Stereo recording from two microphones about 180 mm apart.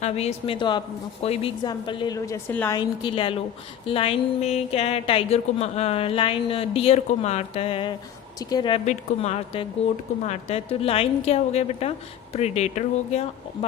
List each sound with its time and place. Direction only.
0.0 s a woman's voice: 35° left (ahead or behind); by 2.7 s 10° left (ahead or behind)
2.7 s a woman's voice: 25° left (ahead or behind)